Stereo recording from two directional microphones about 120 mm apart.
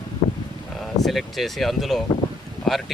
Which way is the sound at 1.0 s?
Centre (ahead or behind).